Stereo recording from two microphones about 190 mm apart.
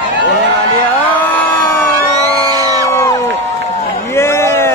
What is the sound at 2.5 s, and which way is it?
Crowd, 20° right (ahead or behind).